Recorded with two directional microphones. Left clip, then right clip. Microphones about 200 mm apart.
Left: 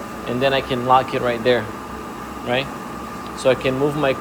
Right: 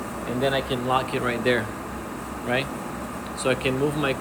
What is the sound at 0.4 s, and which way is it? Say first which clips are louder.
Speech: left 7 dB; 40° left (ahead or behind).